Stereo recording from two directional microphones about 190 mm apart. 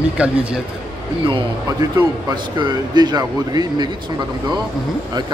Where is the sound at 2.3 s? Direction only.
25° right (ahead or behind).